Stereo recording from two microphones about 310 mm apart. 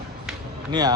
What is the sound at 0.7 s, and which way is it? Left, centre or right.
Speech, centre.